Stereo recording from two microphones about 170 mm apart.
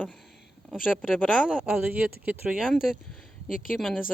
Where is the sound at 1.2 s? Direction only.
Centre (ahead or behind).